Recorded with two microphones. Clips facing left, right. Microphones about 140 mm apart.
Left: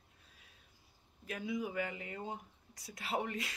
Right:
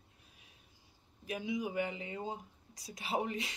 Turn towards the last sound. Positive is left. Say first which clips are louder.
# right 2 dB
turn(degrees=-20)  # may be behind; listen again after turning